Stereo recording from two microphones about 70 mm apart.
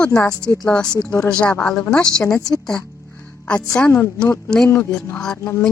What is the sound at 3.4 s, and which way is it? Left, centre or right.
Speech, centre.